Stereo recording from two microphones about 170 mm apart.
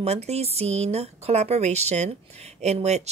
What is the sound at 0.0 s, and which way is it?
Speech, 40° right (ahead or behind).